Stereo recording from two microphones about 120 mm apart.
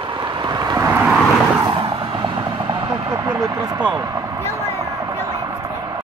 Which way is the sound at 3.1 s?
25° right (ahead or behind).